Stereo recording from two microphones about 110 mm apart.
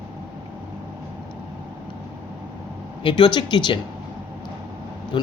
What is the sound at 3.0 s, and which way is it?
Speech, 45° left (ahead or behind).